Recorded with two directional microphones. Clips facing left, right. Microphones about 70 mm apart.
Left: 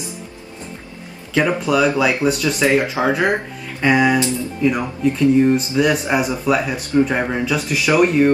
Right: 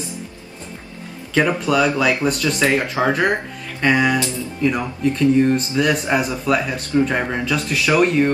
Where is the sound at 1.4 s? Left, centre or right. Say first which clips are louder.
Left 3 dB; centre.